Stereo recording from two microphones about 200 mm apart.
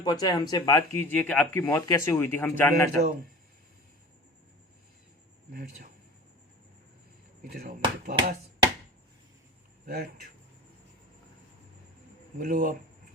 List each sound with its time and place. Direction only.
0.0 s speech: 20° left (ahead or behind)
5.5 s speech: 45° right (ahead or behind)
7.5 s speech: 50° right (ahead or behind)
9.8 s speech: 50° right (ahead or behind)
12.4 s speech: 45° right (ahead or behind)